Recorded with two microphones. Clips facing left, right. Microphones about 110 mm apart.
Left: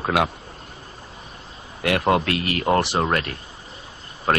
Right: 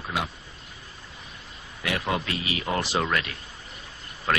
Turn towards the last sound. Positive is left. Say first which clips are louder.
# left 5 dB
turn(degrees=35)  # may be behind; listen again after turning